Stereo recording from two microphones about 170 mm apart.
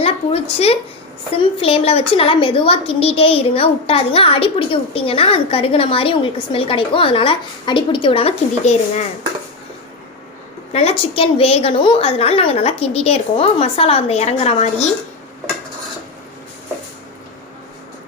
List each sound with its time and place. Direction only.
0.0 s a sound: 35° left (ahead or behind)
1.3 s a woman's voice: 35° left (ahead or behind)
10.7 s a woman's voice: 35° left (ahead or behind)